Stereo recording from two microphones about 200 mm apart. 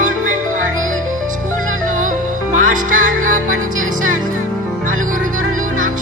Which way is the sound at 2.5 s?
40° right (ahead or behind).